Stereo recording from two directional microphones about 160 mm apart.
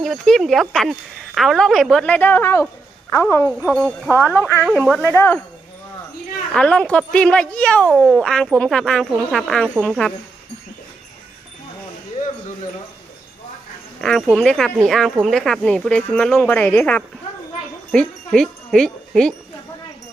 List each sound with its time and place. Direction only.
0.0 s a woman's voice: centre (ahead or behind)
4.6 s speech: 5° right (ahead or behind)
5.1 s speech: 15° left (ahead or behind)
6.5 s speech: 5° left (ahead or behind)
14.0 s speech: 5° left (ahead or behind)
17.9 s wind chime: 5° left (ahead or behind)